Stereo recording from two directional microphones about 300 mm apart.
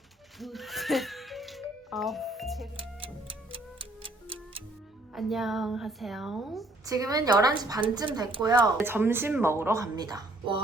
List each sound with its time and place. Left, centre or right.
0.3 s a sound: centre
2.7 s music: centre
5.1 s speech: centre
6.8 s a woman's voice: centre